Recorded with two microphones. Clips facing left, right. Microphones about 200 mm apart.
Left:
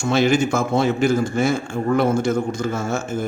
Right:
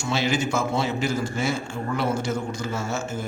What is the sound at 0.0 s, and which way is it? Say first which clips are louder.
A man's voice: left 7 dB; 50° left (ahead or behind).